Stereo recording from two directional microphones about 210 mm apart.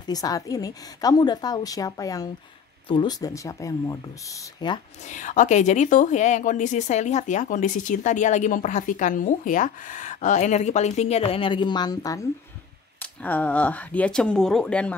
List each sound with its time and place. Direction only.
0.0 s a woman's voice: 15° left (ahead or behind)
5.0 s a woman's voice: 35° left (ahead or behind); by 15.0 s 5° left (ahead or behind)